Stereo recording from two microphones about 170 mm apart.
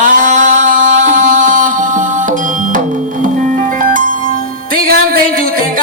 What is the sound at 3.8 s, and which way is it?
Music, 55° right (ahead or behind).